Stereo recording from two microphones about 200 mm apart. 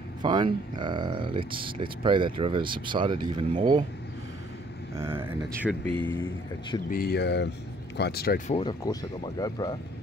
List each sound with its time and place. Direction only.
0.2 s speech: 20° right (ahead or behind)
4.9 s speech: 10° right (ahead or behind)
5.9 s speech: 10° left (ahead or behind)
6.9 s speech: 50° left (ahead or behind)
8.5 s speech: 25° left (ahead or behind)